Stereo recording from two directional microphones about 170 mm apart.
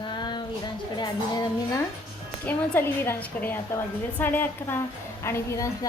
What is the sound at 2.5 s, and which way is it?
A woman's voice, 10° left (ahead or behind).